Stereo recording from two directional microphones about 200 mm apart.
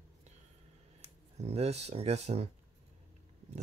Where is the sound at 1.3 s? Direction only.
30° right (ahead or behind).